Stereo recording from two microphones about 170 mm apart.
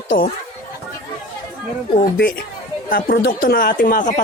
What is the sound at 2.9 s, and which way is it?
Speech, 65° left (ahead or behind).